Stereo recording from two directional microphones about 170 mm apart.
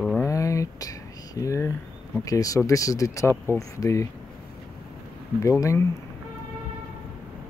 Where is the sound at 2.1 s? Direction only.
20° left (ahead or behind).